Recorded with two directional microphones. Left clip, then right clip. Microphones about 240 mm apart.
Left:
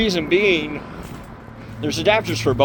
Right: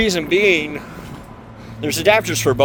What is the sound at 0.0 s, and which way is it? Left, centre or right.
Speech, right.